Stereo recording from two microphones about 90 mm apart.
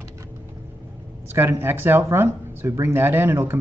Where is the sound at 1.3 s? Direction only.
25° right (ahead or behind).